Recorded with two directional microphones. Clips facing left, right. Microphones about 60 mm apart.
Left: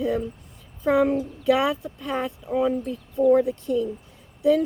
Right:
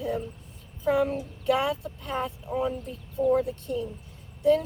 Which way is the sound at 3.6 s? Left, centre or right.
Left.